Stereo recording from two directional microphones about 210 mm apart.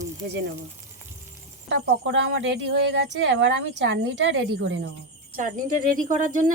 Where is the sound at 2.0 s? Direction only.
60° right (ahead or behind).